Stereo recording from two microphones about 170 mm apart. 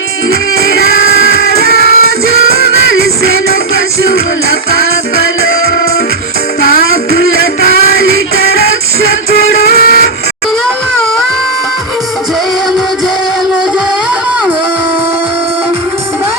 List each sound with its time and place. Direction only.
1.3 s music: 65° left (ahead or behind)
6.6 s music: 65° left (ahead or behind)
9.3 s music: 65° left (ahead or behind)